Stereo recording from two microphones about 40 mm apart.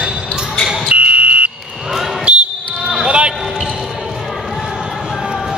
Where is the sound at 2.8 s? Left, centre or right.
Right.